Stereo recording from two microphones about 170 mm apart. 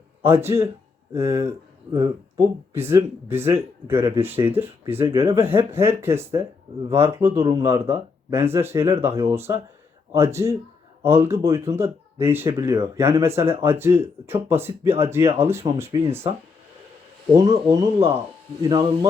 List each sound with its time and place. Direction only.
0.2 s speech: 15° right (ahead or behind)
17.3 s speech: 20° right (ahead or behind)